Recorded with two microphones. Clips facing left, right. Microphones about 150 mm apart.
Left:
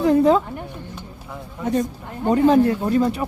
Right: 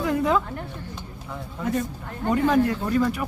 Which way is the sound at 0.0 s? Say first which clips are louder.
Left 7 dB; 30° left (ahead or behind).